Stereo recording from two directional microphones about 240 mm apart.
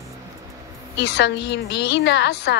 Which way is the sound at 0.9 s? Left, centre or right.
Left.